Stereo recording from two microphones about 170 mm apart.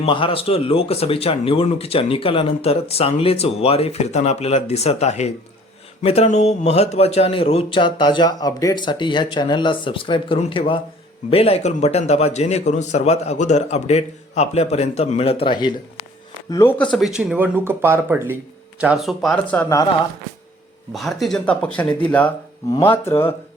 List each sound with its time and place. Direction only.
0.0 s speech: 30° left (ahead or behind)
16.7 s speech: 5° left (ahead or behind)
19.6 s speech: 20° left (ahead or behind)
20.9 s speech: centre (ahead or behind)